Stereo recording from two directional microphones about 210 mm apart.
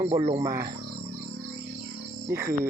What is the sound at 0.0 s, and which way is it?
Speech, 15° right (ahead or behind).